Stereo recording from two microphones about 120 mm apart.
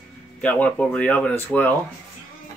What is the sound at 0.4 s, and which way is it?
Speech, 15° left (ahead or behind).